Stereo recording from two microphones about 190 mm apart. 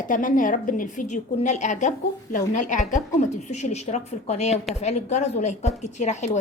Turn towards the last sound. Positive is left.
turn(degrees=40)  # may be behind; listen again after turning